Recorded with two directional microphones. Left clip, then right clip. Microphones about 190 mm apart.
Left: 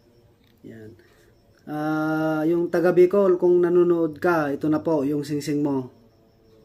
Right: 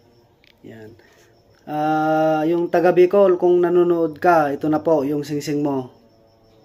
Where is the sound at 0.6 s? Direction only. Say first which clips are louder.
Right 3 dB; 20° left (ahead or behind).